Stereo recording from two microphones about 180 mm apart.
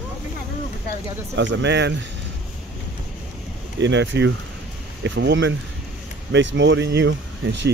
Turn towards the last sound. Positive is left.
turn(degrees=-85)